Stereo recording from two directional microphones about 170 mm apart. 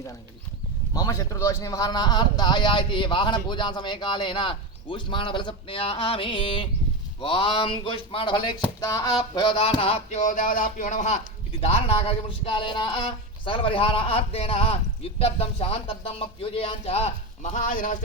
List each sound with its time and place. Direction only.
0.9 s a man's voice: 20° left (ahead or behind); by 11.2 s 45° left (ahead or behind)
11.5 s speech: 35° left (ahead or behind); by 17.9 s 50° left (ahead or behind)